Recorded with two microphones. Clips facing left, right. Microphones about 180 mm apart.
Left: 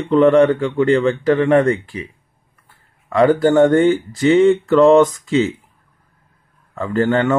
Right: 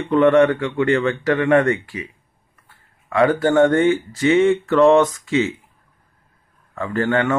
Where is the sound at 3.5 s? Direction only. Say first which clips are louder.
Left 2 dB; 35° left (ahead or behind).